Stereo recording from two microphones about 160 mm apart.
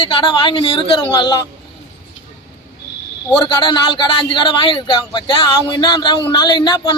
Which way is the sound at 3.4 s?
30° left (ahead or behind).